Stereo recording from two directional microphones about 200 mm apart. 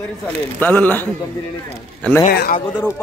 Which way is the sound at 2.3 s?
50° left (ahead or behind).